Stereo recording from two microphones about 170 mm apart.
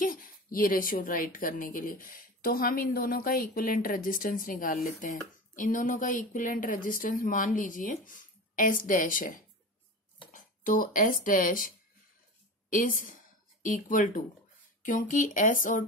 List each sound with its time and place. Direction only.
0.0 s a woman's voice: 55° left (ahead or behind)